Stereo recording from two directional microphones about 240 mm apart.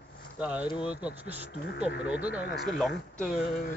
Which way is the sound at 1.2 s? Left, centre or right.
Right.